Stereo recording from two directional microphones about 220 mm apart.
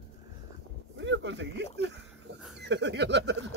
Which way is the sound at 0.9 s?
55° right (ahead or behind).